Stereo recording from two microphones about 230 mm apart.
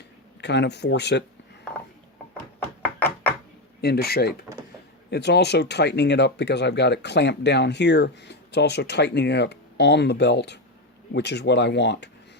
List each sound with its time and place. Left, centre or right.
0.4 s speech: left
2.8 s a sound: centre
3.8 s speech: left